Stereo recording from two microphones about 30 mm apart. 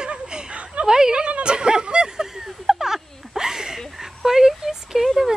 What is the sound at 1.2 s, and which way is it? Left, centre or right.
Speech, right.